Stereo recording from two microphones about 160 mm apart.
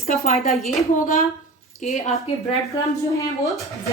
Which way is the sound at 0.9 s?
55° left (ahead or behind).